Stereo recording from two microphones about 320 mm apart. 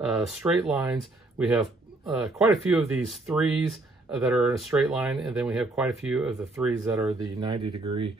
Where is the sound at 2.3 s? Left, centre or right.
Centre.